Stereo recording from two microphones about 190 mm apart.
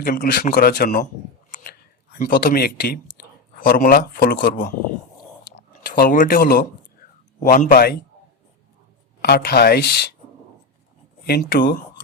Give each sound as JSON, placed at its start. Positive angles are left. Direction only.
{"t": 0.0, "sound": "a man's voice", "side_deg": 45}
{"t": 1.5, "sound": "a sound", "side_deg": 50}
{"t": 3.6, "sound": "a man's voice", "side_deg": 45}
{"t": 5.9, "sound": "a man's voice", "side_deg": 45}
{"t": 9.2, "sound": "speech", "side_deg": 55}
{"t": 11.3, "sound": "speech", "side_deg": 55}